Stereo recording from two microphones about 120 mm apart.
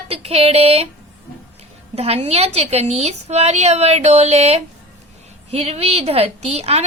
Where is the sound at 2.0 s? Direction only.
60° right (ahead or behind).